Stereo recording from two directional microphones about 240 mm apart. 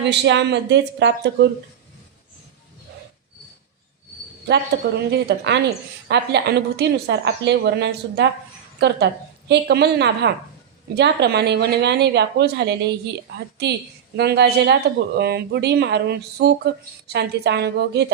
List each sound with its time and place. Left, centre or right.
0.0 s speech: right
4.4 s speech: right
9.5 s speech: right
14.2 s speech: right